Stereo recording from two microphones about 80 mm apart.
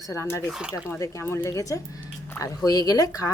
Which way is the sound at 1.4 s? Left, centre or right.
Left.